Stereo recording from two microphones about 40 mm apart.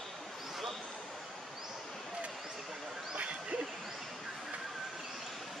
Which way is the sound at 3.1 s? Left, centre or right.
Right.